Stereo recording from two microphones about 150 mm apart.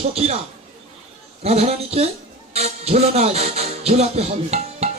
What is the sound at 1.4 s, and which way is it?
Speech, 45° right (ahead or behind).